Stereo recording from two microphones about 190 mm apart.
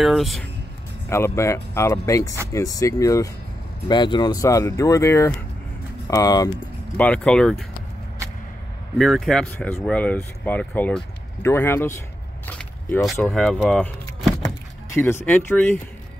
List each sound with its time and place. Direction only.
0.0 s speech: centre (ahead or behind)
1.0 s speech: 15° left (ahead or behind)
7.0 s speech: 5° left (ahead or behind)
8.9 s speech: centre (ahead or behind)
12.4 s single-lens reflex camera: 10° left (ahead or behind)
13.0 s speech: centre (ahead or behind)